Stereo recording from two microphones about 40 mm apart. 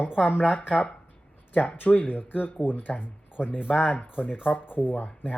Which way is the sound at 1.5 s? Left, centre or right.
Left.